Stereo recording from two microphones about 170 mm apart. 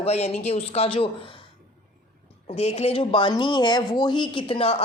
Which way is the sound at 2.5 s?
40° left (ahead or behind).